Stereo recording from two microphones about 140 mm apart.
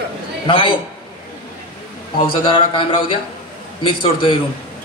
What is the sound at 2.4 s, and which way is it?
Speech, 40° left (ahead or behind).